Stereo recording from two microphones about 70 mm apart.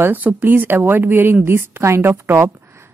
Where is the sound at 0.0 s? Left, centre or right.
Right.